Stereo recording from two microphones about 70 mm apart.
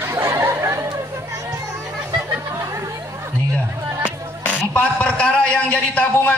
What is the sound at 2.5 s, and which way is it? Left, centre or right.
Chatter, right.